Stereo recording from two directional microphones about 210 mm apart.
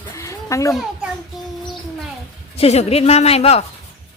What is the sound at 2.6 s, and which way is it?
Speech, 30° left (ahead or behind).